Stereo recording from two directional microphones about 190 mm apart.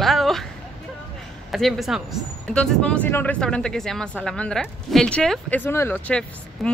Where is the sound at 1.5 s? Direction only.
Centre (ahead or behind).